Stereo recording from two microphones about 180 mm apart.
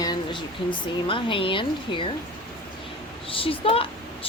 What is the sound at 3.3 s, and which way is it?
Speech, 30° left (ahead or behind).